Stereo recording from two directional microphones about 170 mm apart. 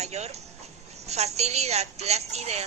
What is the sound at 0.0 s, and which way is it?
A woman's voice, 40° right (ahead or behind).